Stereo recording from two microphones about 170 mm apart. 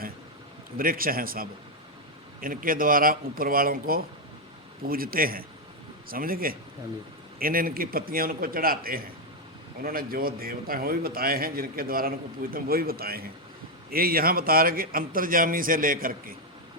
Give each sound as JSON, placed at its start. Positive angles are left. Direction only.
{"t": 0.8, "sound": "a man's voice", "side_deg": -55}